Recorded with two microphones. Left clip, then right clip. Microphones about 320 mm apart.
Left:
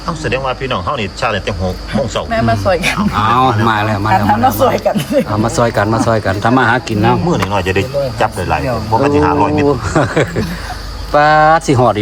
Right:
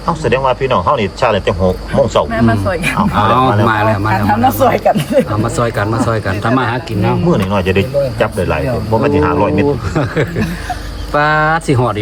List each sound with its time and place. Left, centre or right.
0.1 s speech: right
2.3 s speech: left
3.2 s speech: centre
5.4 s speech: centre
7.3 s speech: centre
9.9 s speech: left